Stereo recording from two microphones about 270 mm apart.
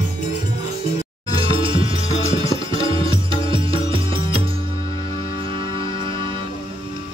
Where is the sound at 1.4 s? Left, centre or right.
Centre.